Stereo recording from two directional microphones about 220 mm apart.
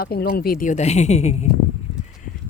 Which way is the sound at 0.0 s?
45° left (ahead or behind).